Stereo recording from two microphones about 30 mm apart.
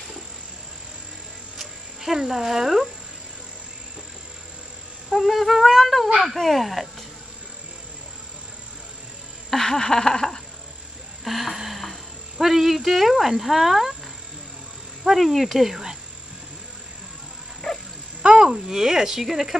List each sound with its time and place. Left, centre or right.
1.6 s a sound: centre
2.2 s speech: centre
5.1 s humming: centre
6.2 s speech: centre
9.6 s a sound: centre
11.2 s speech: centre
11.7 s music: centre
12.4 s speech: centre
15.0 s speech: centre
17.7 s livestock: centre
18.2 s a sound: right
18.5 s speech: centre